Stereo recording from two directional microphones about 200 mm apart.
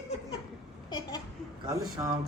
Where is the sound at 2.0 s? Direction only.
15° right (ahead or behind).